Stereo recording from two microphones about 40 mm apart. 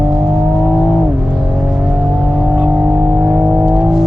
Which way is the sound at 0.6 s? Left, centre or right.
Centre.